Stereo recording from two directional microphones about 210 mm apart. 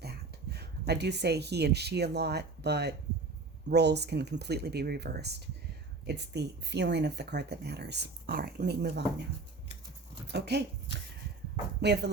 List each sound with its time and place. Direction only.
0.0 s speech: 50° right (ahead or behind)
10.3 s speech: 50° right (ahead or behind)
11.8 s speech: 55° right (ahead or behind)